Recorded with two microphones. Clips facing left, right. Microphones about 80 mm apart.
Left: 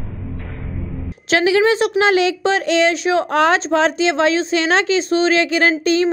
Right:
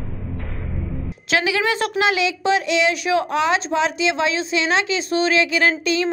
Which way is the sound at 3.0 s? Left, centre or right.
Left.